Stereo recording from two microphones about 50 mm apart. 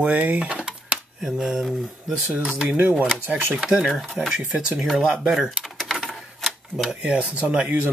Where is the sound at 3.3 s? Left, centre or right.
Centre.